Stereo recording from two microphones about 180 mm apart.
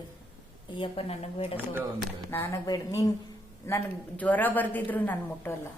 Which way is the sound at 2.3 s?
15° left (ahead or behind).